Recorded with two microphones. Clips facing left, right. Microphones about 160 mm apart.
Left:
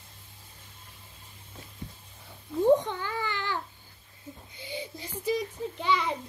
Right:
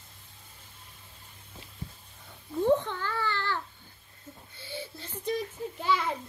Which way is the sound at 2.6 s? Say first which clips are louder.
Left 3 dB; 15° left (ahead or behind).